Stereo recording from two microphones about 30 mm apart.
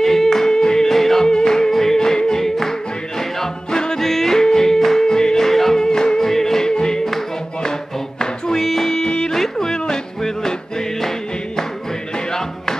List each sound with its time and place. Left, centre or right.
0.0 s a capella: centre
0.5 s music: left
0.8 s yodeling: centre
1.2 s music: left
2.0 s a capella: left
3.2 s music: centre
4.0 s yodeling: centre
5.0 s yodeling: left
8.5 s music: centre
8.9 s music: left